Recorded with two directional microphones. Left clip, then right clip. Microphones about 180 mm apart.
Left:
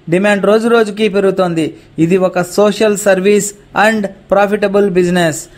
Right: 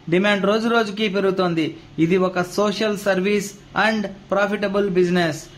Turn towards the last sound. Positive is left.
turn(degrees=40)  # may be behind; listen again after turning